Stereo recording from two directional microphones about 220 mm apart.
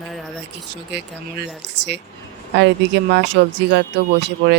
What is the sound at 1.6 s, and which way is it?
Speech, 50° right (ahead or behind).